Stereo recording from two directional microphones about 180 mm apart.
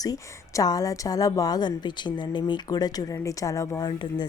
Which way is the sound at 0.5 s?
20° left (ahead or behind).